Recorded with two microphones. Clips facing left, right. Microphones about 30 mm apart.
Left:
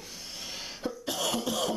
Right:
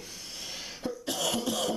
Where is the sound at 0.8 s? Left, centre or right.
Centre.